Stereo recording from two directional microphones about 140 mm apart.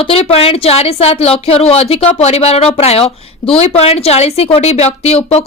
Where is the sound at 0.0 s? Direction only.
45° left (ahead or behind).